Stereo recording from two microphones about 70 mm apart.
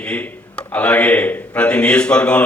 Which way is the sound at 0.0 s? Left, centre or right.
Centre.